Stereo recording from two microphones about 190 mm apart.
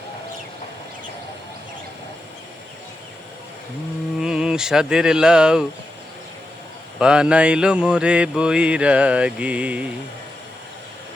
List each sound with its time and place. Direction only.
4.2 s speech: 5° right (ahead or behind)
7.0 s mantra: 5° right (ahead or behind)